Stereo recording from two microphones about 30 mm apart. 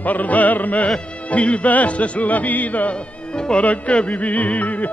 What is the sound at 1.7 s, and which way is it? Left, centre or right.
Speech, left.